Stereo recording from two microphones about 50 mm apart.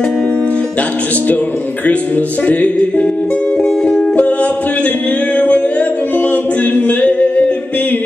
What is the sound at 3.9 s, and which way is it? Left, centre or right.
Music, left.